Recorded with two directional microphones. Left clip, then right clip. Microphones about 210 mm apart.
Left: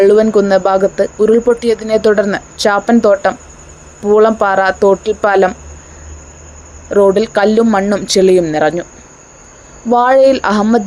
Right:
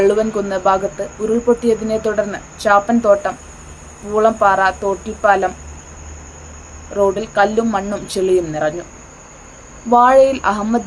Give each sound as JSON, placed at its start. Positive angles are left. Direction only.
{"t": 0.0, "sound": "speech", "side_deg": 40}
{"t": 6.9, "sound": "speech", "side_deg": 40}
{"t": 9.9, "sound": "speech", "side_deg": 35}